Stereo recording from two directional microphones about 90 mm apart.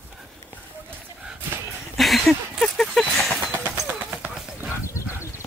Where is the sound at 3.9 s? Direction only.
15° right (ahead or behind).